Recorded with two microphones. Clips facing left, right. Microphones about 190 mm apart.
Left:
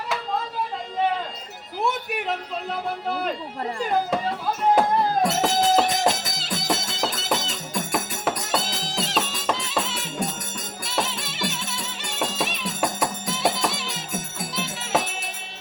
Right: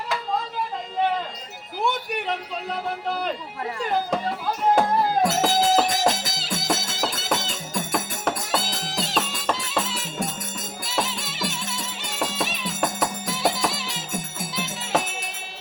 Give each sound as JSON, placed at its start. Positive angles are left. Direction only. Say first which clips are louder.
{"t": 1.8, "sound": "a man's voice", "louder": "even", "side_deg": 0}
{"t": 3.8, "sound": "music", "louder": "left 1 dB", "side_deg": 0}